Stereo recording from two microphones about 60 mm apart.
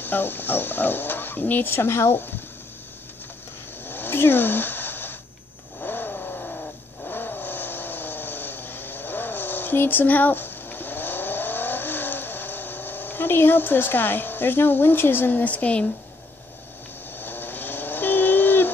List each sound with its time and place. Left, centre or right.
0.0 s speech: left
3.8 s cat: left
5.8 s vehicle: left
17.2 s a sound: left